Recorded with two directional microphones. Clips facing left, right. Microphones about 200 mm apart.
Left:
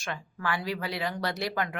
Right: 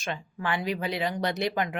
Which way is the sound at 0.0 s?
20° right (ahead or behind).